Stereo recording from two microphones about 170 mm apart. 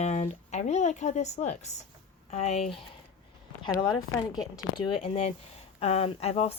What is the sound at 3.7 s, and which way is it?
Speech, 20° left (ahead or behind).